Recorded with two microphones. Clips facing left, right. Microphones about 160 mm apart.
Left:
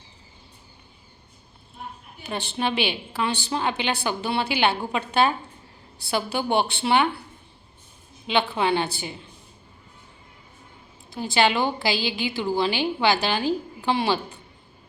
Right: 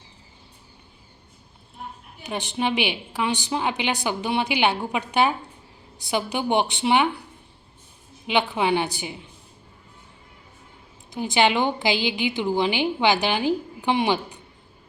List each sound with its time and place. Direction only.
2.2 s a woman's voice: 15° right (ahead or behind)
8.3 s a woman's voice: 15° right (ahead or behind)
11.1 s a woman's voice: 15° right (ahead or behind)